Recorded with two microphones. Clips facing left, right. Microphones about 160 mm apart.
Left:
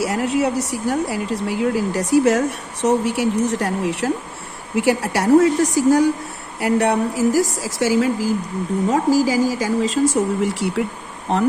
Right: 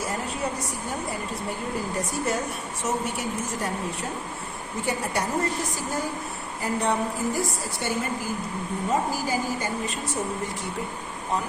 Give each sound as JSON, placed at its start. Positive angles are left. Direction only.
{"t": 0.0, "sound": "a woman's voice", "side_deg": 90}
{"t": 6.6, "sound": "a woman's voice", "side_deg": 80}